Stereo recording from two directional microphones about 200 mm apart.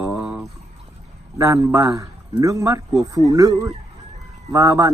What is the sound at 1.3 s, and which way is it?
Speech, 15° right (ahead or behind).